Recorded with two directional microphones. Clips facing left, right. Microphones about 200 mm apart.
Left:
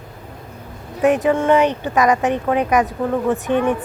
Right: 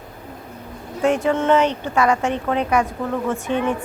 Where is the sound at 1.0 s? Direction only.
15° left (ahead or behind).